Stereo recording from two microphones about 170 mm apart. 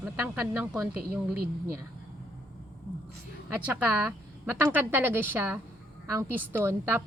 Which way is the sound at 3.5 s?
10° right (ahead or behind).